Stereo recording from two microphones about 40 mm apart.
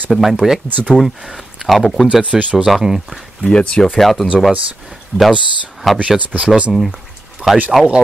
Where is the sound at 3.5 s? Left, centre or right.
Left.